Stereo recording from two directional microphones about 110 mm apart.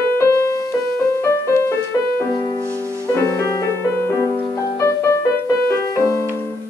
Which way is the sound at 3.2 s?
25° left (ahead or behind).